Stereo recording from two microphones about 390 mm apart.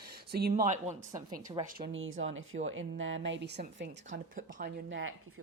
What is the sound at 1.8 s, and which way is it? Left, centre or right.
Speech, right.